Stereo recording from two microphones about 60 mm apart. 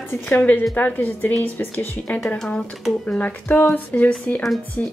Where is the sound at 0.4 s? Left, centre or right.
Left.